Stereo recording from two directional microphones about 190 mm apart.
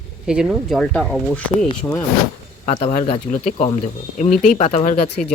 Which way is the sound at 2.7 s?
35° left (ahead or behind).